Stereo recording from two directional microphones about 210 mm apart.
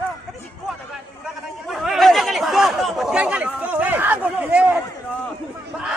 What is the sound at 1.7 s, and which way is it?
Chatter, centre (ahead or behind).